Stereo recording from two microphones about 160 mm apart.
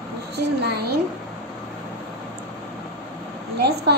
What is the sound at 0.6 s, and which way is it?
Speech, 90° right.